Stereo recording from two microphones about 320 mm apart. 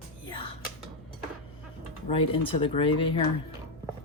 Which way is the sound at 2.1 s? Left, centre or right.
Centre.